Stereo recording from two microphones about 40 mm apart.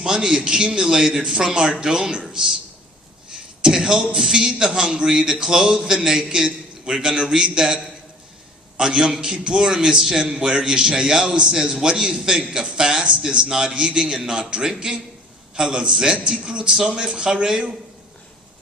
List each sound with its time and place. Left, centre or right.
0.0 s a man's voice: centre
3.6 s a man's voice: centre
8.8 s a man's voice: centre